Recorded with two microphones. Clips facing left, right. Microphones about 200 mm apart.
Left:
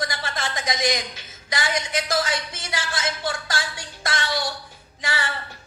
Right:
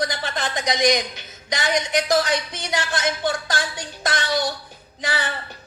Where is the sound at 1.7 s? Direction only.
15° right (ahead or behind).